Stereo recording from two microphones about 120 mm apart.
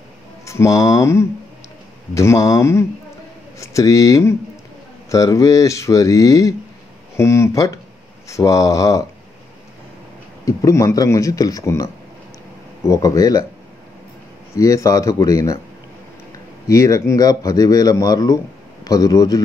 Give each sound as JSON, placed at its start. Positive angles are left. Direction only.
{"t": 0.5, "sound": "a man's voice", "side_deg": 25}
{"t": 10.4, "sound": "a man's voice", "side_deg": 25}
{"t": 14.5, "sound": "a man's voice", "side_deg": 25}
{"t": 16.6, "sound": "a man's voice", "side_deg": 30}